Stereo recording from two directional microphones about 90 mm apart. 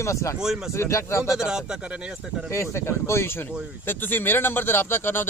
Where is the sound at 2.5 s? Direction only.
30° left (ahead or behind).